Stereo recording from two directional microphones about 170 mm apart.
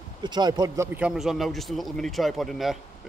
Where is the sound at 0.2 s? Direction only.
25° right (ahead or behind).